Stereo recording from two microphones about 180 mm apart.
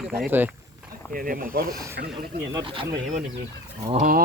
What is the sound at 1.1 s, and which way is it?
Speech, 50° right (ahead or behind).